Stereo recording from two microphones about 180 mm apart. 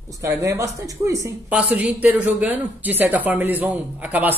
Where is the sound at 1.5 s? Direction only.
5° right (ahead or behind).